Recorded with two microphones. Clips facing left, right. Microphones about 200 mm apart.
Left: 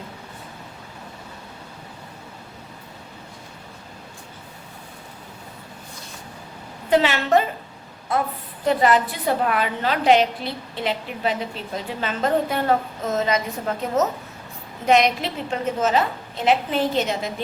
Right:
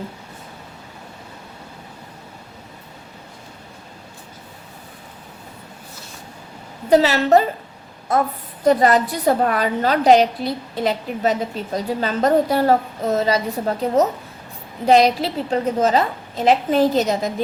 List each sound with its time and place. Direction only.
6.9 s a woman's voice: 40° right (ahead or behind)